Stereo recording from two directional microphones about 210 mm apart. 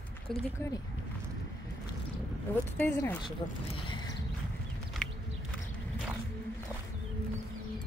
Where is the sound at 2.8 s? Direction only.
10° left (ahead or behind).